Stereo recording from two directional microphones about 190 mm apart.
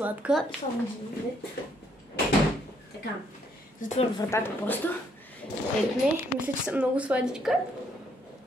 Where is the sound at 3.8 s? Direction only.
45° left (ahead or behind).